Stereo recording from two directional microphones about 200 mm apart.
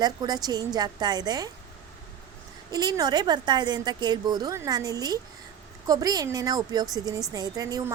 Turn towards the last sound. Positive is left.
turn(degrees=-20)  # may be behind; listen again after turning